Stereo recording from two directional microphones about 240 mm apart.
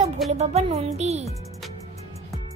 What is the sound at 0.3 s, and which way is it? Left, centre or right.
Speech, right.